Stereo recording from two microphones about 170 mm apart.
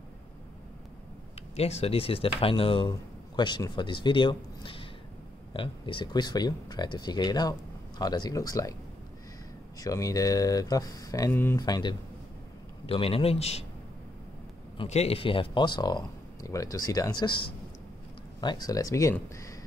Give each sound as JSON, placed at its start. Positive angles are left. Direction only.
{"t": 1.6, "sound": "speech", "side_deg": 35}
{"t": 9.8, "sound": "speech", "side_deg": 20}
{"t": 14.8, "sound": "speech", "side_deg": 35}